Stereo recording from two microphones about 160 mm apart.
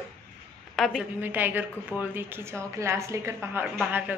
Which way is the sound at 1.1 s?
10° right (ahead or behind).